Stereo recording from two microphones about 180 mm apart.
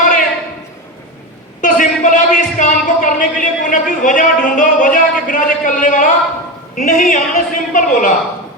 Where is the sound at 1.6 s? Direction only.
45° left (ahead or behind).